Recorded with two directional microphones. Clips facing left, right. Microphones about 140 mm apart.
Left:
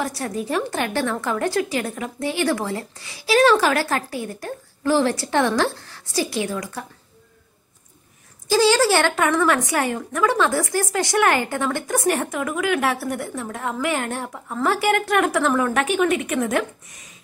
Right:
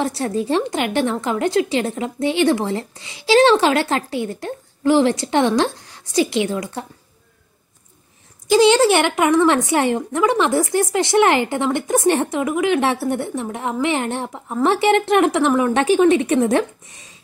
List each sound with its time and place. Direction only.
0.0 s a woman's voice: 25° right (ahead or behind)
8.5 s a woman's voice: 20° right (ahead or behind)
15.8 s a woman's voice: 30° right (ahead or behind)